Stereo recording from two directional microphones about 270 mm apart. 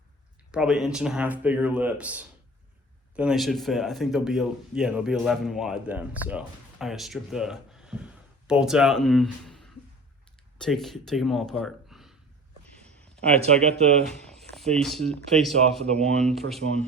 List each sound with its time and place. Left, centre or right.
0.5 s speech: centre
11.6 s a sound: centre
13.4 s speech: right
14.1 s speech: centre